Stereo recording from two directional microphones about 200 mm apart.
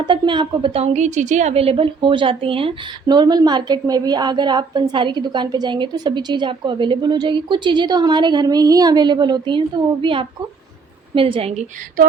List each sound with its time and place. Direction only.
0.0 s a woman's voice: 25° right (ahead or behind)